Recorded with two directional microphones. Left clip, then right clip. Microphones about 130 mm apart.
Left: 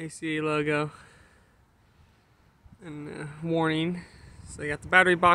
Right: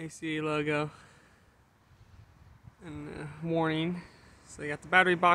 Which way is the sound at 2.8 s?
20° left (ahead or behind).